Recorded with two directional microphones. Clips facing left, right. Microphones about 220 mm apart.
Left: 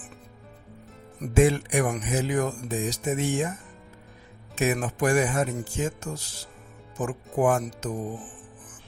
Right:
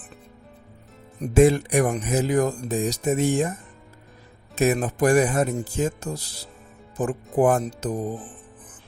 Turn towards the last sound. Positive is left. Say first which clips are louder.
# right 3 dB
turn(degrees=-35)  # may be behind; listen again after turning